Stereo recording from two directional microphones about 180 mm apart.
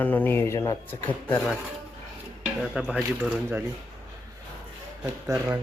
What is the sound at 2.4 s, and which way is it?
Speech, 5° right (ahead or behind).